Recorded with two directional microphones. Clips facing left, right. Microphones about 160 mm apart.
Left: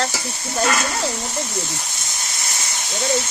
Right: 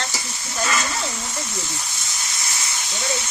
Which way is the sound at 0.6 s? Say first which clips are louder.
Left 4 dB; 55° left (ahead or behind).